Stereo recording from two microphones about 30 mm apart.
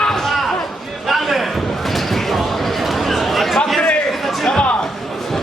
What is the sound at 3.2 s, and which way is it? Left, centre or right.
Chatter, centre.